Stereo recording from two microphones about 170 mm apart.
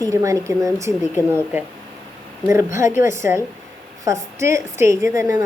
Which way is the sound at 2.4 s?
15° right (ahead or behind).